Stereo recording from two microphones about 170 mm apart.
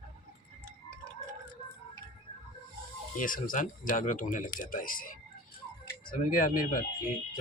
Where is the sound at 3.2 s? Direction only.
50° left (ahead or behind).